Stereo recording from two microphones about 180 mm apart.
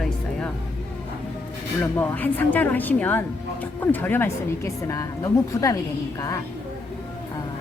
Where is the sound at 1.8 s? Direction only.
10° left (ahead or behind).